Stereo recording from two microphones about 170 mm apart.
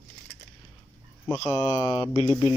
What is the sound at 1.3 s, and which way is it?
Speech, 20° left (ahead or behind).